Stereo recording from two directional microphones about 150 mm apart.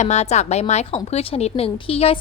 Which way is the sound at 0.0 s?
50° left (ahead or behind).